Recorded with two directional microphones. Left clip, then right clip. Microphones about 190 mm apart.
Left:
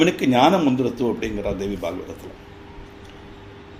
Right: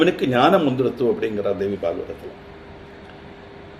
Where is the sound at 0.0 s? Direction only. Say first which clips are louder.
Even; 50° left (ahead or behind).